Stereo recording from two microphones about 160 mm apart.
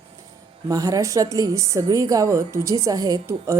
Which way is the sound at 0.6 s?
20° right (ahead or behind).